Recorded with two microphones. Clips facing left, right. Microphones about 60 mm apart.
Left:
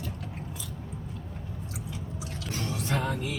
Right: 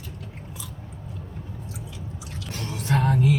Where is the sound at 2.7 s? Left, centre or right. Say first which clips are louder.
Right 8 dB; right.